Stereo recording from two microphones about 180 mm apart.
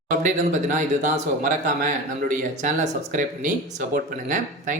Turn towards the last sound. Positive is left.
turn(degrees=-45)  # may be behind; listen again after turning